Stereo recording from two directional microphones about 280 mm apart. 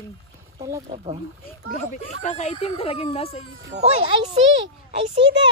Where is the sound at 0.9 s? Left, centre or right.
Right.